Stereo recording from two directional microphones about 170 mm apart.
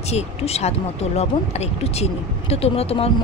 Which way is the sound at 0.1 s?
40° left (ahead or behind).